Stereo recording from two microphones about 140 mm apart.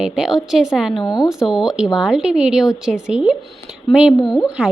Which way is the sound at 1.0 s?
30° left (ahead or behind).